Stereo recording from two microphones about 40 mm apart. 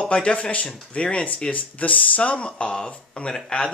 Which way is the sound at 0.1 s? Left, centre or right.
Left.